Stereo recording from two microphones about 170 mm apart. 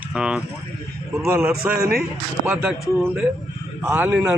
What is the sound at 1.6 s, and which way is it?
Speech, 10° right (ahead or behind).